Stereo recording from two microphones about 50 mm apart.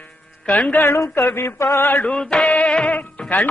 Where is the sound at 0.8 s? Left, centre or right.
Left.